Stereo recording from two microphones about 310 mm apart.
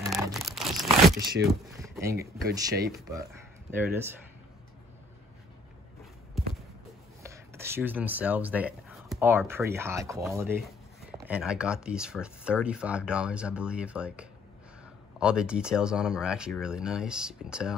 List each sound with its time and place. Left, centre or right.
0.2 s crumpling: centre
1.4 s a sound: centre
2.8 s speech: centre
7.2 s speech: centre